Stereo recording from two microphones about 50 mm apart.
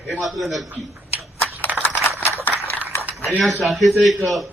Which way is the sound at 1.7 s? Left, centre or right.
Right.